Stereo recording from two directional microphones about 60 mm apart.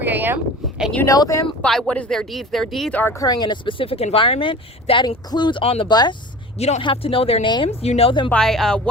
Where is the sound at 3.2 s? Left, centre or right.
Left.